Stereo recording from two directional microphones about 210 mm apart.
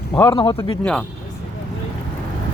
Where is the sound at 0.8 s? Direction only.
5° left (ahead or behind).